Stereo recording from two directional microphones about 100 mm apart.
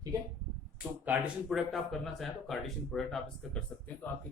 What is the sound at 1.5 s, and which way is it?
Speech, centre (ahead or behind).